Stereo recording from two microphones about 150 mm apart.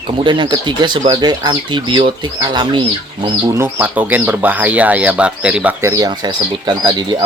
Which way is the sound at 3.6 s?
10° right (ahead or behind).